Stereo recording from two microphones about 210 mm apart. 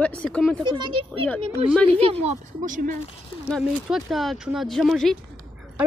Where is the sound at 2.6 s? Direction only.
40° right (ahead or behind).